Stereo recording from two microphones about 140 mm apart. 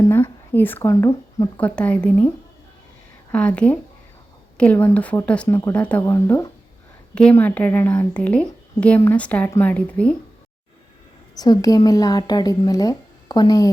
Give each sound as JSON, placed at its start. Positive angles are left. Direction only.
{"t": 0.0, "sound": "a woman's voice", "side_deg": 15}
{"t": 1.5, "sound": "speech", "side_deg": 10}
{"t": 3.3, "sound": "speech", "side_deg": 10}
{"t": 7.1, "sound": "speech", "side_deg": 5}
{"t": 11.3, "sound": "a woman's voice", "side_deg": 30}